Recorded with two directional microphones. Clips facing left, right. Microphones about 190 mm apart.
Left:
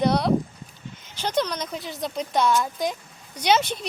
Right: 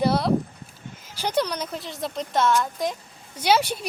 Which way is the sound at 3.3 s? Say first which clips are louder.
Even; 10° right (ahead or behind).